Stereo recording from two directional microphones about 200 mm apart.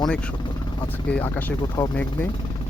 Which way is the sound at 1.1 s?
10° left (ahead or behind).